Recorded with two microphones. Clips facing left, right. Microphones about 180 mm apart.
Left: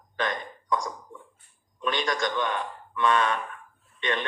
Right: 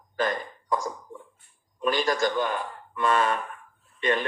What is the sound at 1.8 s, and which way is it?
A man's voice, 5° right (ahead or behind).